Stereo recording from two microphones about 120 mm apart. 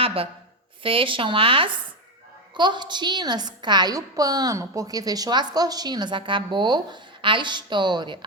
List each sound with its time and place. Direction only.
0.0 s a woman's voice: 50° right (ahead or behind)